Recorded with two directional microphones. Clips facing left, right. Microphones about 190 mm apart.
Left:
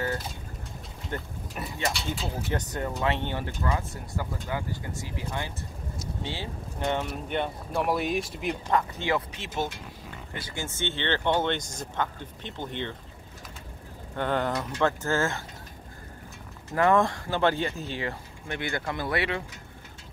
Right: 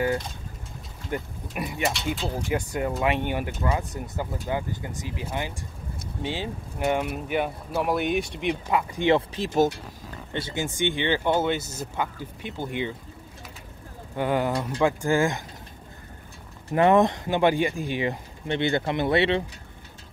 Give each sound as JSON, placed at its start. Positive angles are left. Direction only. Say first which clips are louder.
{"t": 1.1, "sound": "speech", "louder": "right 5 dB", "side_deg": -15}
{"t": 1.9, "sound": "speech", "louder": "right 1 dB", "side_deg": 0}
{"t": 2.3, "sound": "speech", "louder": "right 4 dB", "side_deg": -10}
{"t": 9.0, "sound": "speech", "louder": "right 7 dB", "side_deg": -30}
{"t": 9.5, "sound": "speech", "louder": "right 10 dB", "side_deg": -40}
{"t": 10.3, "sound": "speech", "louder": "right 7 dB", "side_deg": -20}
{"t": 14.1, "sound": "speech", "louder": "right 3 dB", "side_deg": -10}
{"t": 16.7, "sound": "speech", "louder": "right 4 dB", "side_deg": -20}